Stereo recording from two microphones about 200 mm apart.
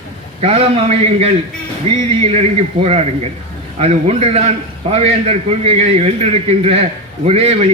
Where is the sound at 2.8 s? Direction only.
30° right (ahead or behind).